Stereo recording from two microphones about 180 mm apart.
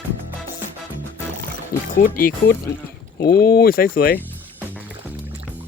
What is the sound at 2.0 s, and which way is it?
Speech, 55° left (ahead or behind).